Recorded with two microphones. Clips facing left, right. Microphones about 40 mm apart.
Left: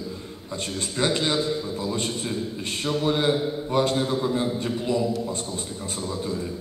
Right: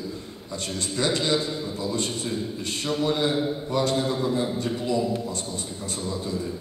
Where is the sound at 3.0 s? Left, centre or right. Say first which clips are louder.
Left 1 dB; left.